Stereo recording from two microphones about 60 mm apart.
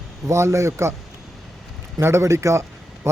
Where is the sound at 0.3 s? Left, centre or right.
Right.